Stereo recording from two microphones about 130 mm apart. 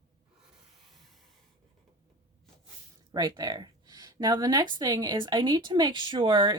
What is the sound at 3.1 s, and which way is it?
Speech, 30° right (ahead or behind).